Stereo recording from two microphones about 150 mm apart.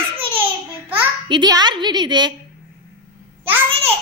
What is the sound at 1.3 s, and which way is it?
A woman's voice, 30° right (ahead or behind).